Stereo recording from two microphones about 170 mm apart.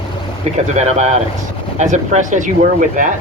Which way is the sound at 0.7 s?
40° right (ahead or behind).